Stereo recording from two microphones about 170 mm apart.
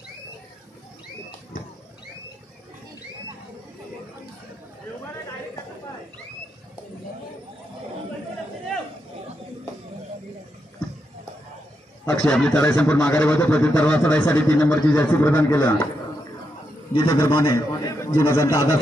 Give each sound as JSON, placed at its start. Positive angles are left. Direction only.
{"t": 12.1, "sound": "a man's voice", "side_deg": 5}
{"t": 16.9, "sound": "a man's voice", "side_deg": 30}
{"t": 17.2, "sound": "a man's voice", "side_deg": 15}